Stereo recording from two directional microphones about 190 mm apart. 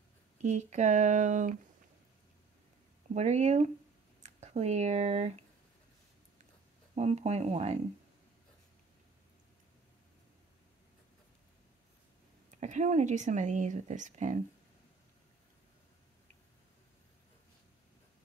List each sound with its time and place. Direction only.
0.4 s speech: 40° right (ahead or behind)
3.2 s speech: 35° right (ahead or behind)
7.0 s speech: 35° right (ahead or behind)
12.5 s speech: 40° right (ahead or behind)